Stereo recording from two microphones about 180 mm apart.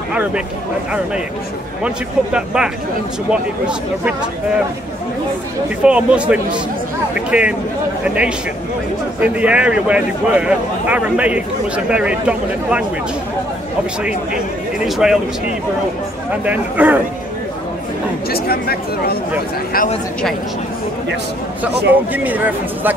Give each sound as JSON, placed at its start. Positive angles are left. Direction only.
{"t": 1.8, "sound": "speech", "side_deg": -5}
{"t": 5.8, "sound": "speech", "side_deg": -5}
{"t": 14.9, "sound": "speech", "side_deg": -5}
{"t": 16.3, "sound": "speech", "side_deg": -10}
{"t": 18.3, "sound": "speech", "side_deg": 60}
{"t": 22.1, "sound": "speech", "side_deg": -10}